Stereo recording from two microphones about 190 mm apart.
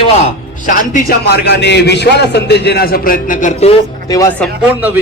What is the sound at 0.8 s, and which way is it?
A man's voice, 50° left (ahead or behind).